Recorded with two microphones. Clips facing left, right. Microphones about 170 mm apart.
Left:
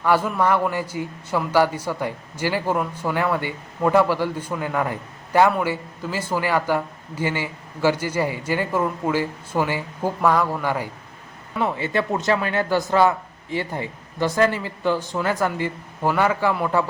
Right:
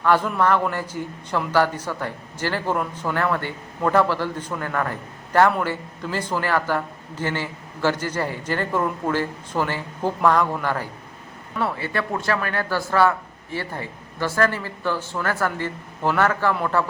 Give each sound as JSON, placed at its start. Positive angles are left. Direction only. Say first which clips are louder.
{"t": 0.0, "sound": "a man's voice", "louder": "even", "side_deg": 10}